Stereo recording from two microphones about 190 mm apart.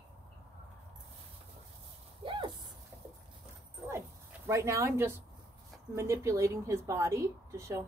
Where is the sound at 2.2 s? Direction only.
25° right (ahead or behind).